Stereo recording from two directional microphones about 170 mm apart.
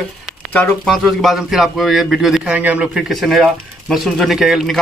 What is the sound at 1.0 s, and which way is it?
A man's voice, centre (ahead or behind).